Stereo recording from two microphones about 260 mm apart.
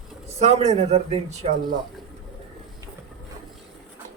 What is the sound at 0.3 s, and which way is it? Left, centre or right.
Speech, right.